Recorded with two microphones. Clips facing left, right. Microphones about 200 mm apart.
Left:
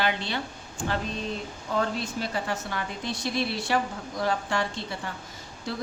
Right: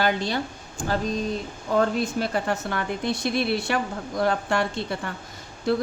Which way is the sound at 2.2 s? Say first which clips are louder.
Right 5 dB; 55° right (ahead or behind).